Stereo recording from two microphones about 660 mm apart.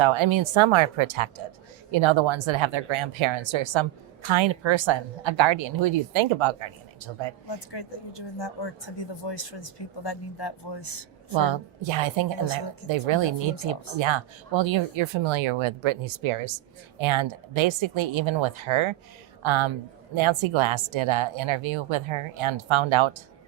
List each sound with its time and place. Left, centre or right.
0.0 s a woman's voice: right
7.4 s speech: left
11.3 s a woman's voice: right